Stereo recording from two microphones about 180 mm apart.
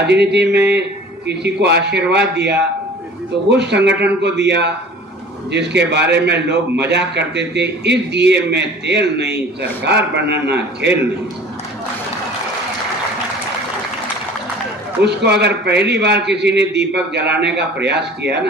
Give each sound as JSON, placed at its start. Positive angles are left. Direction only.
{"t": 0.1, "sound": "a man's voice", "side_deg": -70}
{"t": 15.0, "sound": "a man's voice", "side_deg": -65}